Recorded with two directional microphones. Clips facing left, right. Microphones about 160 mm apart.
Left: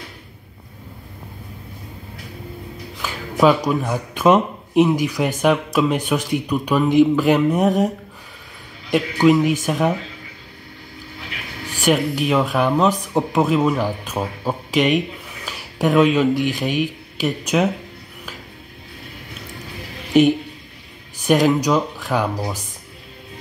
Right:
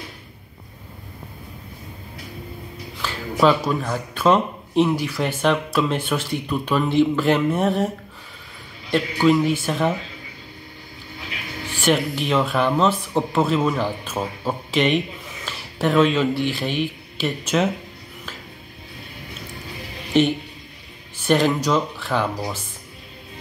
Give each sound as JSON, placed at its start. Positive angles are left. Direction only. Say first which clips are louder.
{"t": 3.0, "sound": "speech", "louder": "left 2 dB", "side_deg": 15}
{"t": 8.9, "sound": "speech", "louder": "left 3 dB", "side_deg": 15}
{"t": 11.8, "sound": "speech", "louder": "left 2 dB", "side_deg": 10}
{"t": 21.2, "sound": "speech", "louder": "left 3 dB", "side_deg": 10}